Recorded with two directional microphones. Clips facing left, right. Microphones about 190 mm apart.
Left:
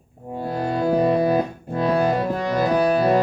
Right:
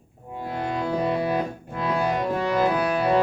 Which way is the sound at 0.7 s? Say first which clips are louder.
Left 7 dB; 40° left (ahead or behind).